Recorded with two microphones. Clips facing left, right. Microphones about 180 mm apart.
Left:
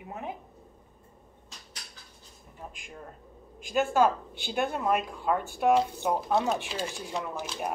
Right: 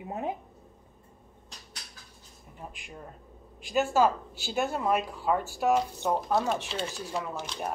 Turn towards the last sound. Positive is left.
turn(degrees=5)  # may be behind; listen again after turning